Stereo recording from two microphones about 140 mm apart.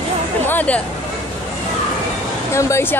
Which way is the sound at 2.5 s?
20° left (ahead or behind).